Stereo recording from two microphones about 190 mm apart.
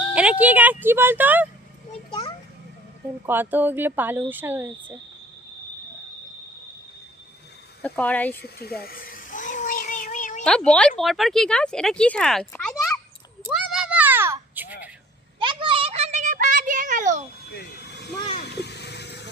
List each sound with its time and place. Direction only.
0.1 s speech: 5° right (ahead or behind)
2.0 s a sound: 25° left (ahead or behind)
3.2 s speech: 10° right (ahead or behind)
7.8 s speech: 10° left (ahead or behind)
8.4 s cat: 55° left (ahead or behind)
10.4 s speech: 5° left (ahead or behind)
13.5 s a sound: centre (ahead or behind)
15.4 s a sound: 25° right (ahead or behind)
17.5 s vehicle: 60° left (ahead or behind)